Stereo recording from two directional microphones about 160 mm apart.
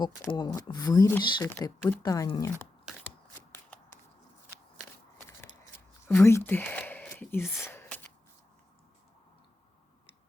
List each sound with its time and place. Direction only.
0.0 s speech: 30° left (ahead or behind)
1.5 s speech: 15° left (ahead or behind)
6.1 s speech: 15° left (ahead or behind)
7.6 s a sound: 15° left (ahead or behind)